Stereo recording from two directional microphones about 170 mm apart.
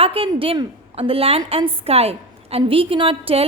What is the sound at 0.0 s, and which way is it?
A woman's voice, 35° right (ahead or behind).